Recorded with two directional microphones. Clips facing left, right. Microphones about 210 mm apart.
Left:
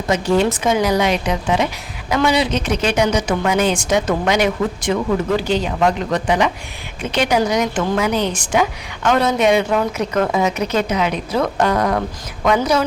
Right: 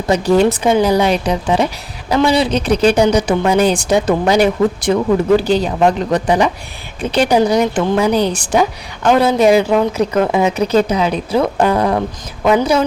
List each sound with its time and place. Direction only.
0.1 s speech: 35° right (ahead or behind)